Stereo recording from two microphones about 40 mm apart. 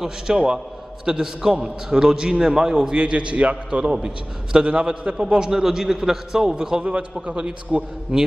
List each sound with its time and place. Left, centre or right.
0.0 s a man's voice: centre
4.6 s a man's voice: right
5.5 s a man's voice: centre